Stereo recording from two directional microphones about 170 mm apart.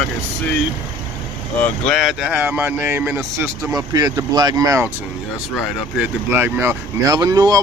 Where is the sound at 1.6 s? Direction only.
Centre (ahead or behind); by 4.8 s 20° right (ahead or behind).